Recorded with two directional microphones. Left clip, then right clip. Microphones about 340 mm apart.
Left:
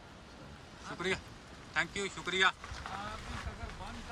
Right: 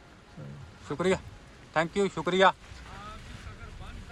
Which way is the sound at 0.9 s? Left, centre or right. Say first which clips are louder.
Right 8 dB; centre.